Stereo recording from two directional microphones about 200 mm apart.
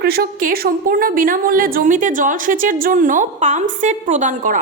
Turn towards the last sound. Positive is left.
turn(degrees=-40)  # may be behind; listen again after turning